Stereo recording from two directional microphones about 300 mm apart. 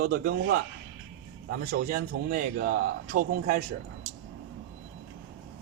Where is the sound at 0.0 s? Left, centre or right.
Right.